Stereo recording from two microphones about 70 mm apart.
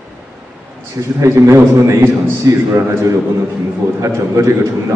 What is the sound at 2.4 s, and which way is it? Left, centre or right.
Speech, right.